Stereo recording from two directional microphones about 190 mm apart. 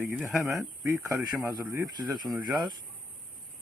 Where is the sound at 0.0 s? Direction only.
10° right (ahead or behind).